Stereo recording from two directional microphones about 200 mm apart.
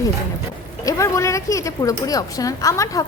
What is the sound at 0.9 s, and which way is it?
A woman's voice, 15° left (ahead or behind).